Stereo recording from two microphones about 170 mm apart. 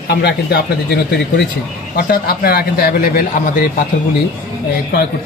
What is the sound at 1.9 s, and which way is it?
Speech, 65° left (ahead or behind).